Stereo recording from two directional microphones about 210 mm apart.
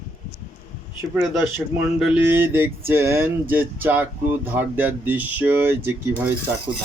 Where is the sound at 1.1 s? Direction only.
10° right (ahead or behind).